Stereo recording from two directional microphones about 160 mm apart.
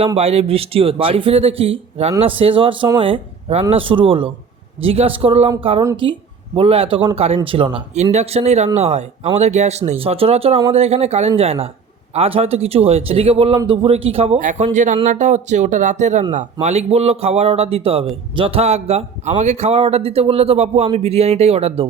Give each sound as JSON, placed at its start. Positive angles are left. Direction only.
{"t": 0.2, "sound": "a man's voice", "side_deg": -40}